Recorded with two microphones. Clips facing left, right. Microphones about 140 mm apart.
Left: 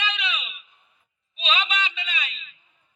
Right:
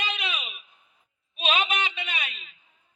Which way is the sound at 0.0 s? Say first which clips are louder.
Left 2 dB; 45° right (ahead or behind).